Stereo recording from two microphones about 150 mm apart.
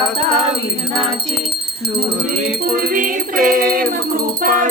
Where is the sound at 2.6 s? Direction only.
75° right (ahead or behind).